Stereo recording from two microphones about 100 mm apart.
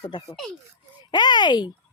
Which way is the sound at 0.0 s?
40° left (ahead or behind).